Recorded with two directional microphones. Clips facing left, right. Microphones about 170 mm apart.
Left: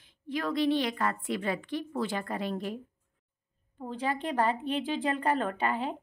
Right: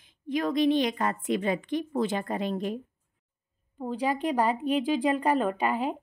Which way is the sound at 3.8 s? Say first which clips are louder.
Right 4 dB; 15° right (ahead or behind).